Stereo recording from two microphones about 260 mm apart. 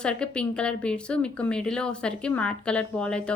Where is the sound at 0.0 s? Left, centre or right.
Centre.